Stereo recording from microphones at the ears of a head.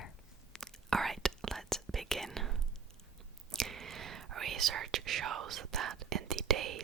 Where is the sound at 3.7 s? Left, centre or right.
Right.